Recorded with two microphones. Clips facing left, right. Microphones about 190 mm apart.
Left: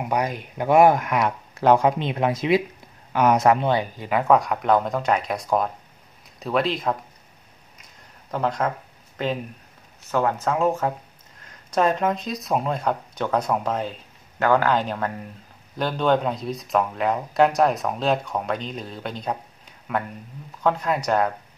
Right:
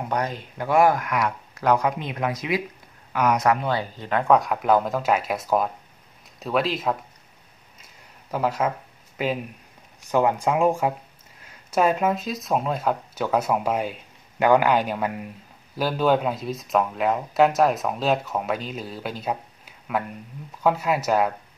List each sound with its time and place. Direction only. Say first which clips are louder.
0.0 s speech: left 2 dB; 10° left (ahead or behind)
8.3 s speech: even; 5° right (ahead or behind)